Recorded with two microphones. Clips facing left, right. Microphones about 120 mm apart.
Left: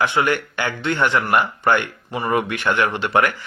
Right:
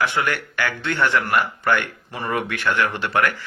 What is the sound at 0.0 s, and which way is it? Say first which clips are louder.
Speech: left 3 dB; 20° left (ahead or behind).